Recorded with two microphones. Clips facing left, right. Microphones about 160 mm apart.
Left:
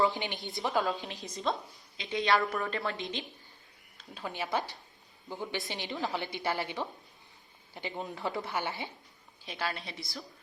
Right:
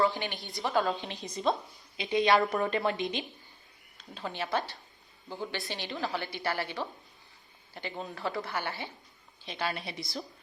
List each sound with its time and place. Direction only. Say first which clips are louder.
0.0 s a woman's voice: right 1 dB; 20° left (ahead or behind)
0.7 s a woman's voice: right 3 dB; centre (ahead or behind)
2.0 s a woman's voice: right 4 dB; 15° right (ahead or behind)
3.9 s a woman's voice: right 1 dB; 5° left (ahead or behind)
9.5 s a woman's voice: right 2 dB; centre (ahead or behind)
9.8 s a woman's voice: right 4 dB; 20° right (ahead or behind)